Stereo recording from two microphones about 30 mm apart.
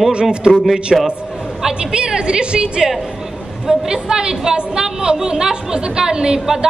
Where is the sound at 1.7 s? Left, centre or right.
Right.